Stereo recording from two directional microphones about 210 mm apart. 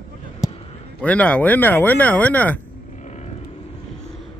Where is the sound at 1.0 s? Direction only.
5° left (ahead or behind).